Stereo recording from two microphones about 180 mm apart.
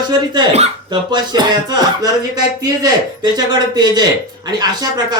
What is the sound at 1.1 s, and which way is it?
Speech, 25° right (ahead or behind).